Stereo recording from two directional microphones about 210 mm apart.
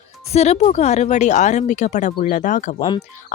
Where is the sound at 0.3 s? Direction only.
30° left (ahead or behind).